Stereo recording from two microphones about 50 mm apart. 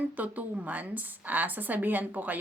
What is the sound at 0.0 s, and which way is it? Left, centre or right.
A woman's voice, right.